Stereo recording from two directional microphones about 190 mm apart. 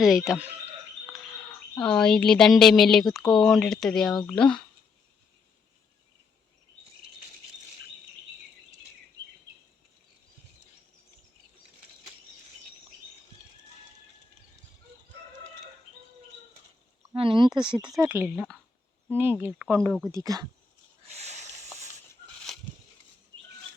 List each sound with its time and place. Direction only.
0.3 s speech: 10° right (ahead or behind)
1.1 s bird: 5° left (ahead or behind)
1.8 s speech: 5° left (ahead or behind)
17.2 s speech: 25° right (ahead or behind)
18.3 s speech: centre (ahead or behind)
19.1 s speech: 10° right (ahead or behind)
21.0 s a sound: 35° right (ahead or behind)
22.5 s a sound: centre (ahead or behind)